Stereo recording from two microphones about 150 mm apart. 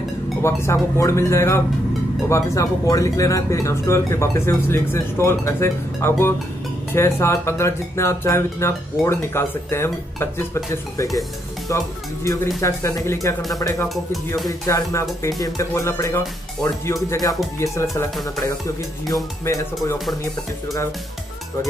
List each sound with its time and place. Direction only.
0.4 s speech: 20° left (ahead or behind)
19.4 s speech: 20° left (ahead or behind)